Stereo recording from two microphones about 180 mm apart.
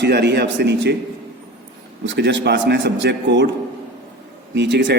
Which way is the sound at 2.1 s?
80° right.